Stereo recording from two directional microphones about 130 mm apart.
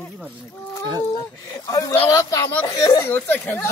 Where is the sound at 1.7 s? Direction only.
25° left (ahead or behind).